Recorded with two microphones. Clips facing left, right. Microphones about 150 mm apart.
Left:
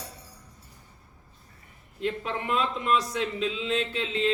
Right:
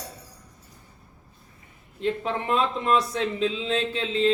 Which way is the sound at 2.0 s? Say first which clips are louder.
Right 3 dB; 30° right (ahead or behind).